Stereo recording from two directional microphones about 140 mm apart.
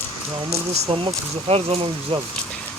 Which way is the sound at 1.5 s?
40° right (ahead or behind).